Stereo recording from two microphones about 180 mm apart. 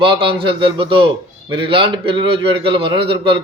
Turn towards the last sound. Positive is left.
turn(degrees=-30)  # may be behind; listen again after turning